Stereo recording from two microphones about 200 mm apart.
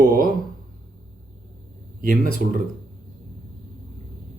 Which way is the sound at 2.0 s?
45° right (ahead or behind).